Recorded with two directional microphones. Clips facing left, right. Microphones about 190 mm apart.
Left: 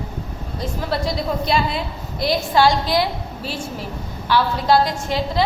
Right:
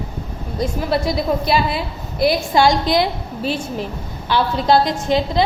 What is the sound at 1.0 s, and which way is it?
A woman's voice, 5° right (ahead or behind).